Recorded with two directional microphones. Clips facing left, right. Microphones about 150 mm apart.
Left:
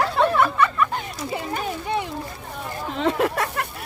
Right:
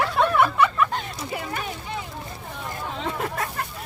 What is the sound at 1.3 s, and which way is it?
Children playing, 25° left (ahead or behind).